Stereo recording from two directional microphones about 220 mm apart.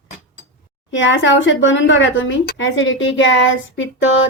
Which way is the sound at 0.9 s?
60° left (ahead or behind).